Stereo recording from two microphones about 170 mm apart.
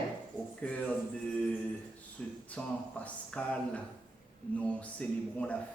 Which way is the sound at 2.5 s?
10° left (ahead or behind).